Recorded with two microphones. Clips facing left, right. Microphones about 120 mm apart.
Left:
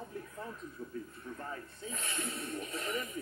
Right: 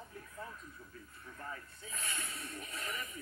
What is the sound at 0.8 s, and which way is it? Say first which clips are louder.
A man's voice: left 11 dB; 35° left (ahead or behind).